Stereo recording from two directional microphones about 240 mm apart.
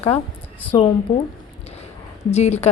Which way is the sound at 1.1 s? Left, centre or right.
Left.